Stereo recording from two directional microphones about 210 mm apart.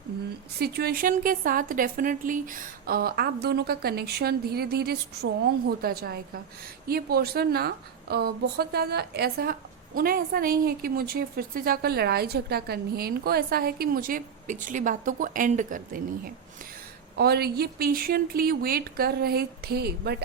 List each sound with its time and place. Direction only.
0.6 s a woman's voice: 50° right (ahead or behind)
17.2 s a woman's voice: 50° right (ahead or behind)